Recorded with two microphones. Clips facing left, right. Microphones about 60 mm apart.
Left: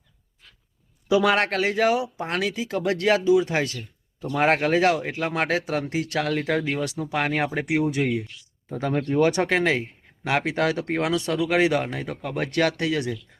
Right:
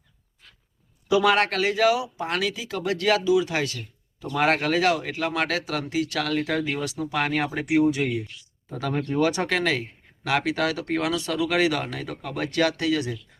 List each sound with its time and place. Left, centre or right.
1.1 s speech: left
4.3 s speech: left
6.1 s speech: left
9.1 s speech: left